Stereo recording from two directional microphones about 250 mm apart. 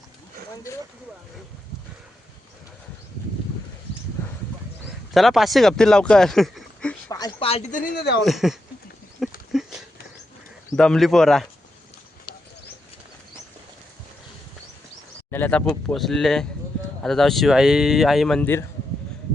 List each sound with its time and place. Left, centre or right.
5.1 s speech: centre
7.1 s speech: centre; by 8.2 s left
8.2 s speech: centre
9.5 s a sound: centre
10.8 s speech: centre
12.3 s a sound: centre
15.3 s speech: centre